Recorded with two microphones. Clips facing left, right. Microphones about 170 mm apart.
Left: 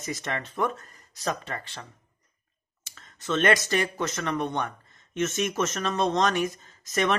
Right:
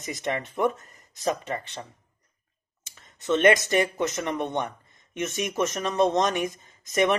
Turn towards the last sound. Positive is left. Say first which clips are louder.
# right 3 dB
turn(degrees=-20)  # may be behind; listen again after turning